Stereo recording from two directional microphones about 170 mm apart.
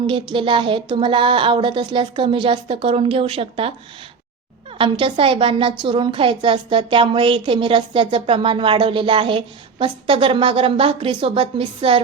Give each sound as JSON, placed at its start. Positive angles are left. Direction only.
{"t": 0.1, "sound": "speech", "side_deg": -30}
{"t": 4.8, "sound": "a woman's voice", "side_deg": -30}